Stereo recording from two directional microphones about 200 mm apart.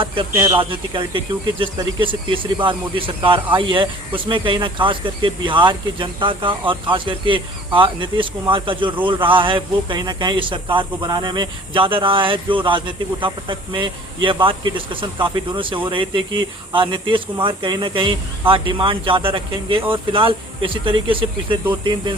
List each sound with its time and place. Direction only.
0.5 s speech: 25° right (ahead or behind)